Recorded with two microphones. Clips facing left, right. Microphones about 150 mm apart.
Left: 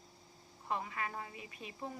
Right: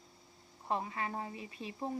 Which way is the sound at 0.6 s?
30° right (ahead or behind).